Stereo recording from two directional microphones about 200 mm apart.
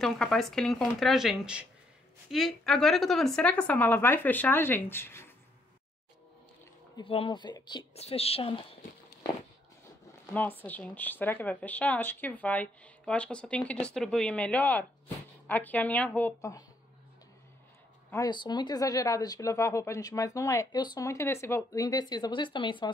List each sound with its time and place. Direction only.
0.0 s speech: centre (ahead or behind)
7.0 s speech: 25° left (ahead or behind)
10.3 s speech: 10° left (ahead or behind)
18.1 s speech: 20° left (ahead or behind)